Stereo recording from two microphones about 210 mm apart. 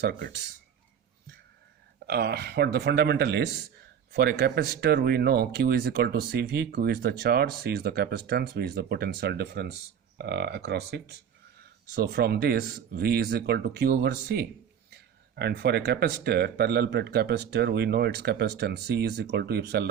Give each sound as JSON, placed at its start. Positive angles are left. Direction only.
{"t": 0.0, "sound": "speech", "side_deg": -50}
{"t": 2.0, "sound": "speech", "side_deg": -50}